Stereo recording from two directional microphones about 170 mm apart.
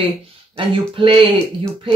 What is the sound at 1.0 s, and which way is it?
Speech, 30° right (ahead or behind).